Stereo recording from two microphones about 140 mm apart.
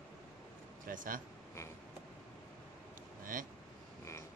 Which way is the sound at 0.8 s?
75° right (ahead or behind).